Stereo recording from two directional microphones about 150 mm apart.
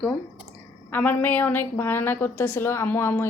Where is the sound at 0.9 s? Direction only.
10° left (ahead or behind).